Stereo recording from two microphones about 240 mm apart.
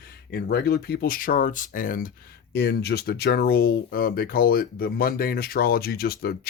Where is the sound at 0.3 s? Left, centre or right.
Left.